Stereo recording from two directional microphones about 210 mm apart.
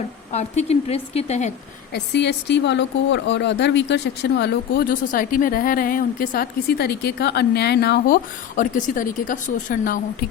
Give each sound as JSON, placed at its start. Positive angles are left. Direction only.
{"t": 0.3, "sound": "a woman's voice", "side_deg": 30}
{"t": 1.9, "sound": "a woman's voice", "side_deg": 55}